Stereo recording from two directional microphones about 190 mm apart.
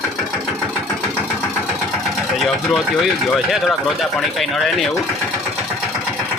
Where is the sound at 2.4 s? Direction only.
Centre (ahead or behind).